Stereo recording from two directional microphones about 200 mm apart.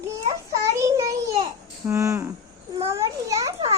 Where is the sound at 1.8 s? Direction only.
15° right (ahead or behind).